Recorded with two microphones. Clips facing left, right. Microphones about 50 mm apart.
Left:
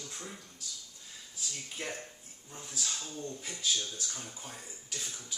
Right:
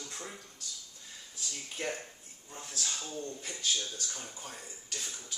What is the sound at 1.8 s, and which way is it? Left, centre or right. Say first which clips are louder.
A man's voice: right 4 dB; centre.